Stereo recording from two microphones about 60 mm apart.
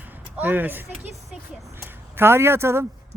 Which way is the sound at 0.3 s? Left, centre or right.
Right.